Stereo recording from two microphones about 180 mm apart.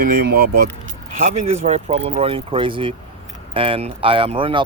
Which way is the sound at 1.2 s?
45° right (ahead or behind).